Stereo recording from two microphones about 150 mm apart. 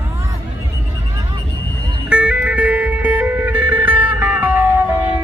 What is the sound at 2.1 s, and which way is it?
Music, 5° right (ahead or behind).